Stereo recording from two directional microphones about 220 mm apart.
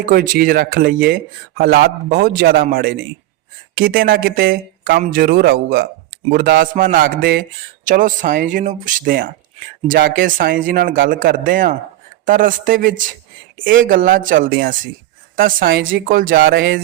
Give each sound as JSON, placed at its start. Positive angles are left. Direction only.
{"t": 0.0, "sound": "speech", "side_deg": -40}